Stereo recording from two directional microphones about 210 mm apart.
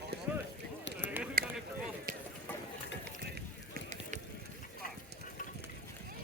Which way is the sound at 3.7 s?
35° right (ahead or behind).